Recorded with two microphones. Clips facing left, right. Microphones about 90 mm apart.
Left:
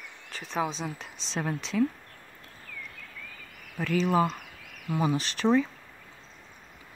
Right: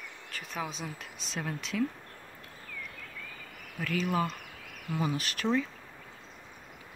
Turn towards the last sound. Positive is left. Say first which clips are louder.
# left 5 dB
turn(degrees=25)  # may be behind; listen again after turning